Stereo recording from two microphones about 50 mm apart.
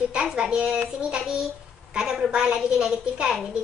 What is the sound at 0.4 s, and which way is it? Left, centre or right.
Speech, centre.